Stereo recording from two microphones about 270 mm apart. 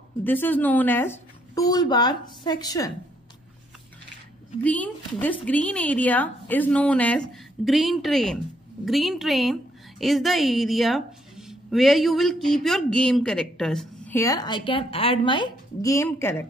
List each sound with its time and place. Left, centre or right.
0.2 s speech: centre
4.6 s a woman's voice: centre